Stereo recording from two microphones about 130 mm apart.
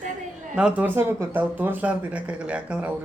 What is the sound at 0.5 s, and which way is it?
Speech, 10° right (ahead or behind).